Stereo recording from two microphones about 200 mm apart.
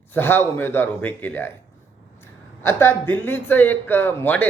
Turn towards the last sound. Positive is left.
turn(degrees=10)  # may be behind; listen again after turning